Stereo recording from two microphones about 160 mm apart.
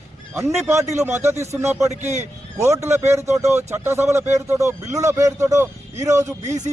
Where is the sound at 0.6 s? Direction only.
15° right (ahead or behind).